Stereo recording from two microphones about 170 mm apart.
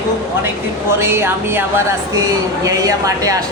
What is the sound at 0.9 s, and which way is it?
Speech, 15° right (ahead or behind).